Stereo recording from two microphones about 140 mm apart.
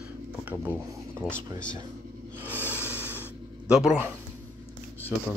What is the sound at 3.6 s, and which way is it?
Speech, 5° right (ahead or behind).